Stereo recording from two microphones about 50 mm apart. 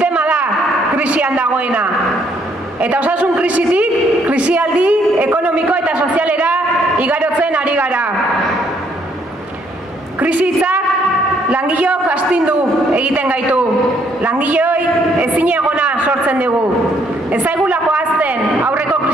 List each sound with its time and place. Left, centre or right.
0.0 s a sound: right
0.9 s a woman's voice: right
10.2 s a woman's voice: right